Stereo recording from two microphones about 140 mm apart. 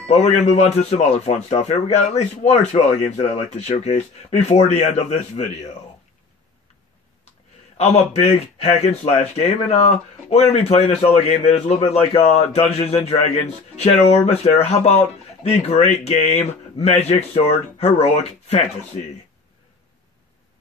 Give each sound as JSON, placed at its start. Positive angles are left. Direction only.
{"t": 0.0, "sound": "speech", "side_deg": 50}
{"t": 7.7, "sound": "speech", "side_deg": 50}